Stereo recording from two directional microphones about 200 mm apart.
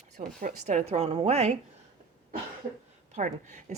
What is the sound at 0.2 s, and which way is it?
A woman's voice, 40° right (ahead or behind).